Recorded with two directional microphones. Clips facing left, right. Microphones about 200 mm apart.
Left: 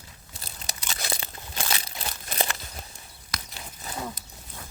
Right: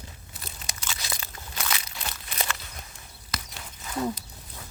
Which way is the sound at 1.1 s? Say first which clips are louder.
Left 3 dB; 30° left (ahead or behind).